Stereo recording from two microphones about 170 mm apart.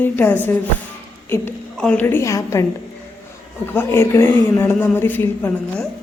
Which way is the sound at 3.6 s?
15° left (ahead or behind).